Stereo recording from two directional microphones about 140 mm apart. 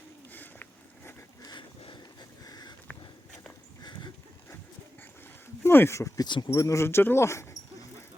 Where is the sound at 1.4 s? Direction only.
30° left (ahead or behind).